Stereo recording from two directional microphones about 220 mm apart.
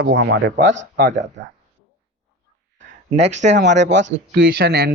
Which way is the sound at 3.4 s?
35° right (ahead or behind).